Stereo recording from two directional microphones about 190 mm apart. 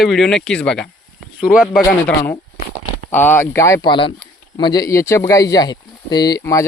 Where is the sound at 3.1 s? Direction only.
10° left (ahead or behind).